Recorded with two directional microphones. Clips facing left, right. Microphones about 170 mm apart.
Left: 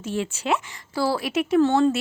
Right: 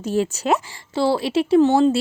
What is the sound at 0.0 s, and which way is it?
Speech, 40° right (ahead or behind).